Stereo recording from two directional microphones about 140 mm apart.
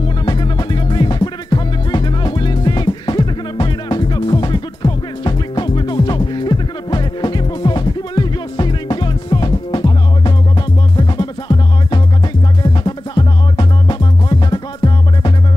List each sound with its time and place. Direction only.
0.2 s music: 30° left (ahead or behind)